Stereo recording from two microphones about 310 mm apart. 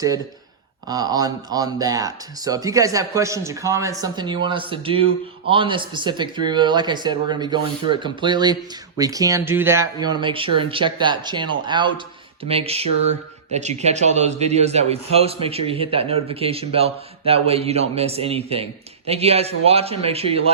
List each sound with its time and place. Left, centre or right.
0.9 s a man's voice: centre